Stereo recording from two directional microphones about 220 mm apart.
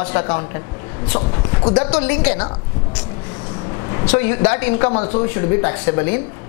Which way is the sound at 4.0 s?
10° left (ahead or behind).